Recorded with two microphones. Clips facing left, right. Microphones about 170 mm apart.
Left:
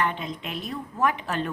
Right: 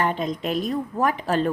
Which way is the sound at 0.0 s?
40° right (ahead or behind).